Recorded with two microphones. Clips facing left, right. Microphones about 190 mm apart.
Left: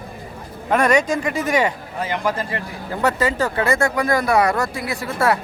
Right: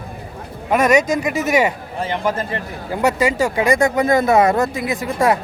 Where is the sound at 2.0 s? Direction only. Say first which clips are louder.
Right 2 dB; 25° right (ahead or behind).